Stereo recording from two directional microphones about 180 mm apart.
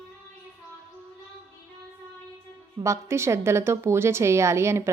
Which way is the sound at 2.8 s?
15° right (ahead or behind).